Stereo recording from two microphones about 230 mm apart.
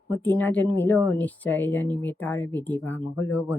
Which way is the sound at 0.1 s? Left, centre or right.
Centre.